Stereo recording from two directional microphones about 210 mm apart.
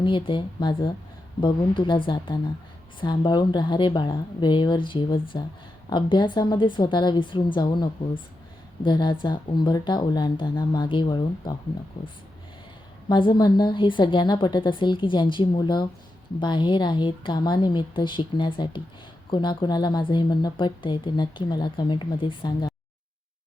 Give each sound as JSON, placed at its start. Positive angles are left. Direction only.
{"t": 0.0, "sound": "a woman's voice", "side_deg": 25}